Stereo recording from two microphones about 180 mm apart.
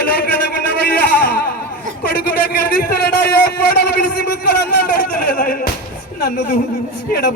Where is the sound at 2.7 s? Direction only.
60° left (ahead or behind).